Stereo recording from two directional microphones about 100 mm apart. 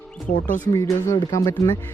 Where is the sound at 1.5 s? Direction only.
25° left (ahead or behind).